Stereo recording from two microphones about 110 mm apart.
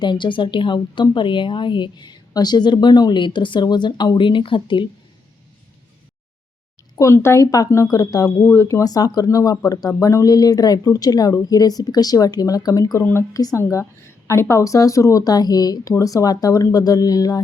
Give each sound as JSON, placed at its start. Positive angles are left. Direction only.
{"t": 0.0, "sound": "a woman's voice", "side_deg": 45}
{"t": 6.9, "sound": "a woman's voice", "side_deg": 25}